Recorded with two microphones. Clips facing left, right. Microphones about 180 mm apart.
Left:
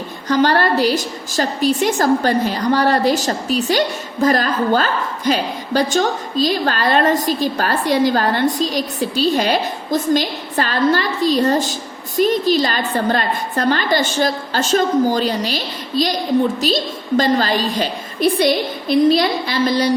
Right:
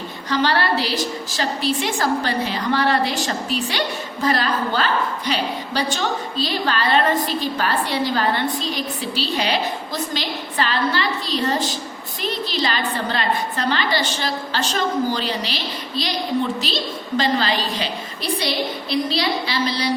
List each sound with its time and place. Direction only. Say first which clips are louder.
0.3 s a woman's voice: left 5 dB; 45° left (ahead or behind)